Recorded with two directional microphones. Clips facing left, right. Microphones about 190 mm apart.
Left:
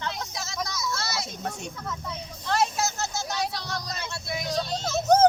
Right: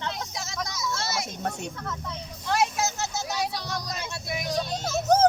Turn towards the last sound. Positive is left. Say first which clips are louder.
# left 1 dB
turn(degrees=-10)  # may be behind; listen again after turning